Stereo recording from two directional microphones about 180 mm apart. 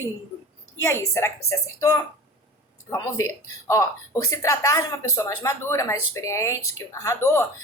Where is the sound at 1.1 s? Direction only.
15° left (ahead or behind).